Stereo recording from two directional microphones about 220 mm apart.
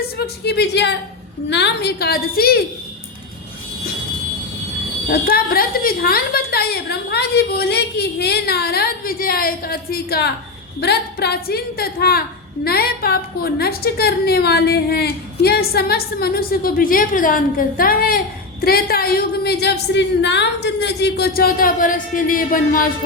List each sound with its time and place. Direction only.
0.4 s a woman's voice: 50° left (ahead or behind)
5.0 s a woman's voice: 45° left (ahead or behind)